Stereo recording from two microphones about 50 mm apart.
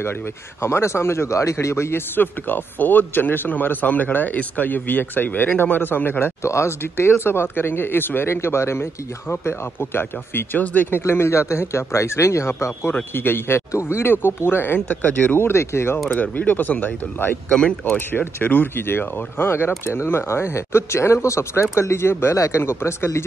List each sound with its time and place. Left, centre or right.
0.6 s a man's voice: left
6.4 s speech: left
10.6 s a man's voice: left
11.0 s speech: left
13.1 s speech: left
13.6 s speech: left
14.1 s speech: left
15.4 s speech: left
16.1 s a man's voice: left
17.5 s speech: centre
17.9 s a man's voice: left
19.8 s speech: left
21.7 s speech: left
22.6 s speech: left